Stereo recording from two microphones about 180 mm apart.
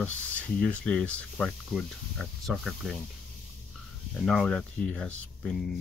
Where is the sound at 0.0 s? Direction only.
10° left (ahead or behind).